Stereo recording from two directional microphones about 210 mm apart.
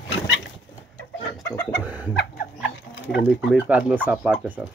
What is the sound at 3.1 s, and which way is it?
Speech, 5° right (ahead or behind).